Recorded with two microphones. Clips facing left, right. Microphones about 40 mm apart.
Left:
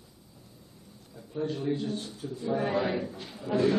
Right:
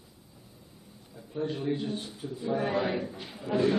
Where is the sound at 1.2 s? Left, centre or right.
Centre.